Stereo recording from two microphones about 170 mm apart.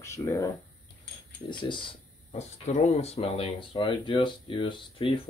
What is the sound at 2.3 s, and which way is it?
Speech, 40° left (ahead or behind).